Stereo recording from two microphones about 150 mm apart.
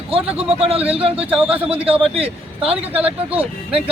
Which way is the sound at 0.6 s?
40° right (ahead or behind).